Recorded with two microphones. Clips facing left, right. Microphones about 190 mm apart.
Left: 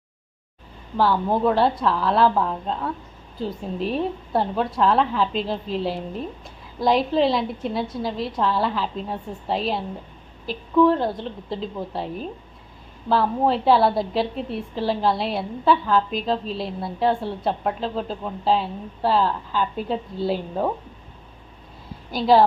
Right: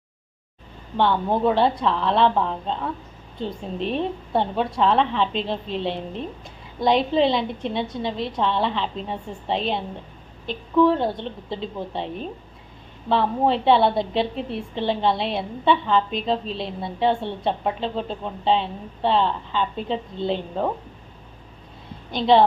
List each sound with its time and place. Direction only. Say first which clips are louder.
0.9 s a woman's voice: even; centre (ahead or behind)
22.1 s a woman's voice: even; 5° left (ahead or behind)